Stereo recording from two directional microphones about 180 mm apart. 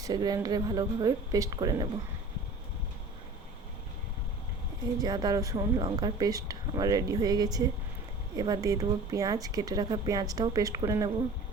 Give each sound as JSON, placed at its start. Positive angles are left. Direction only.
{"t": 0.0, "sound": "speech", "side_deg": -20}
{"t": 4.9, "sound": "speech", "side_deg": -20}